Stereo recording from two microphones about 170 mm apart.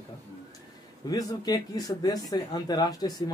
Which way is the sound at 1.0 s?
25° left (ahead or behind).